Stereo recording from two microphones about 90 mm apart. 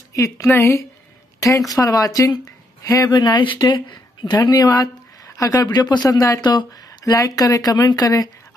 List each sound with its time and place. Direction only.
0.1 s speech: 35° left (ahead or behind)
1.7 s speech: 40° left (ahead or behind)
3.1 s speech: 50° left (ahead or behind)
4.2 s speech: 45° left (ahead or behind)